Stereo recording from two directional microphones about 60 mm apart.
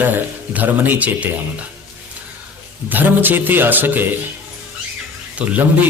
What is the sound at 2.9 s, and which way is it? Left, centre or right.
Speech, right.